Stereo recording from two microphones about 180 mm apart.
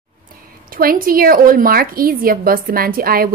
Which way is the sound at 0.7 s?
55° right (ahead or behind).